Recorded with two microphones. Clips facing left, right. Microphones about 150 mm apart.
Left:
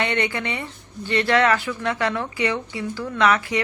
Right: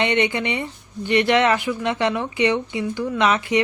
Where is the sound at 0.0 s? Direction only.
20° right (ahead or behind).